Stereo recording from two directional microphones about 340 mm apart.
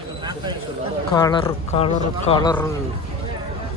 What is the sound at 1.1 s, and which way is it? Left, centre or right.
Speech, centre.